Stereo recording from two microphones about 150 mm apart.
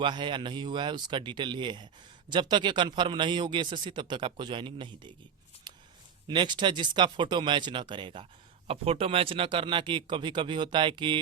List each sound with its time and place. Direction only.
0.0 s a man's voice: 30° right (ahead or behind)
5.7 s a sound: 30° right (ahead or behind)
6.2 s a man's voice: 30° right (ahead or behind)